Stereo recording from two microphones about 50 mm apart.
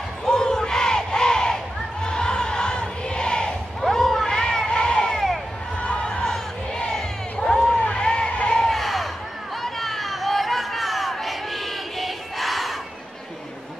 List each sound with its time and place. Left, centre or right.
0.2 s crowd: centre
3.8 s a sound: centre
5.8 s crowd: left
8.6 s crowd: centre